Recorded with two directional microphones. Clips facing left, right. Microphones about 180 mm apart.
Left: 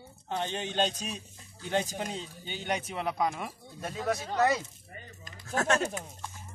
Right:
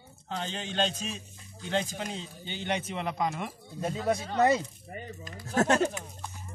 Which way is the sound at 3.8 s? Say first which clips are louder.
Right 3 dB; 30° right (ahead or behind).